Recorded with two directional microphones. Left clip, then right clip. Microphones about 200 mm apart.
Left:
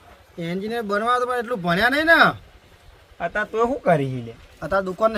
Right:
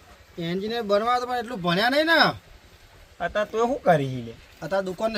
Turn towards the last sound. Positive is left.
turn(degrees=-15)  # may be behind; listen again after turning